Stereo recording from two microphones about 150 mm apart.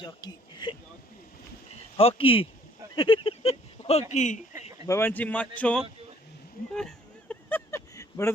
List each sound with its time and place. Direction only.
0.0 s speech: 30° left (ahead or behind)
2.0 s speech: 40° left (ahead or behind)
2.9 s a sound: 35° left (ahead or behind)
4.1 s speech: 55° left (ahead or behind)
4.9 s speech: 15° left (ahead or behind)
6.7 s a sound: 5° left (ahead or behind)